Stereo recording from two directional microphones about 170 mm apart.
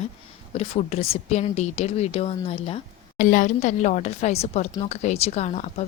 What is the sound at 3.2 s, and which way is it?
Speech, 50° left (ahead or behind).